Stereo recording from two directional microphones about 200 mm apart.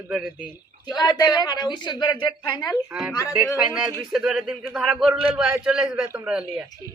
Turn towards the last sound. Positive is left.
turn(degrees=-5)  # may be behind; listen again after turning